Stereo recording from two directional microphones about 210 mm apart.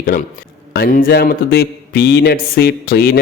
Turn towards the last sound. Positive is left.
turn(degrees=45)  # may be behind; listen again after turning